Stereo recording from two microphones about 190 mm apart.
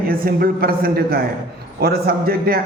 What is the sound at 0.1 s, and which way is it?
A man's voice, 50° right (ahead or behind).